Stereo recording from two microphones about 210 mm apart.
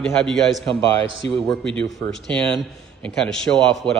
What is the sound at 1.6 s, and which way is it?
A man's voice, 5° left (ahead or behind).